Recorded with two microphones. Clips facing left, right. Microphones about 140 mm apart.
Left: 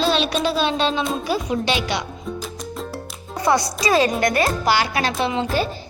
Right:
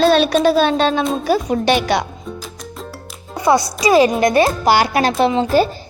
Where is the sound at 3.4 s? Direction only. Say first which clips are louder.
Right 4 dB; 25° right (ahead or behind).